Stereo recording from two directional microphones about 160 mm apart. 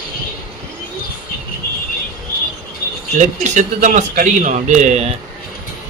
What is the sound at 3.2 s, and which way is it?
A man's voice, 50° right (ahead or behind).